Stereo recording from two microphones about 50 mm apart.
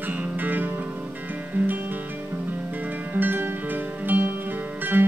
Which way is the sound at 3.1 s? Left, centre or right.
Right.